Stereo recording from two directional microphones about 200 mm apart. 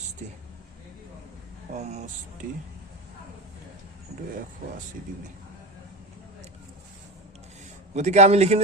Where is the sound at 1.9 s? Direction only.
35° right (ahead or behind).